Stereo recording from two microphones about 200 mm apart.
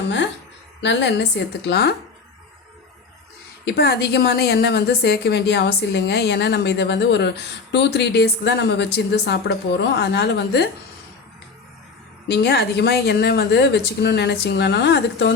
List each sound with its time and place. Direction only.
0.8 s a woman's voice: 60° left (ahead or behind)
3.7 s a woman's voice: 55° left (ahead or behind)
12.3 s a woman's voice: 55° left (ahead or behind)